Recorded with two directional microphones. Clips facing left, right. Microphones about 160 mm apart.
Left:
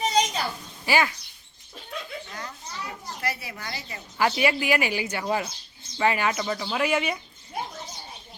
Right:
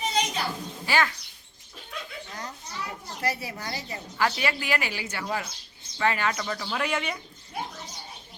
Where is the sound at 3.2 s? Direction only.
40° right (ahead or behind).